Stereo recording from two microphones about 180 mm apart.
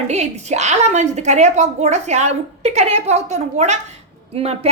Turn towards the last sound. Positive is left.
turn(degrees=-35)  # may be behind; listen again after turning